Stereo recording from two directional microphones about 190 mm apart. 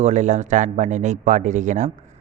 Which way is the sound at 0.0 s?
40° right (ahead or behind).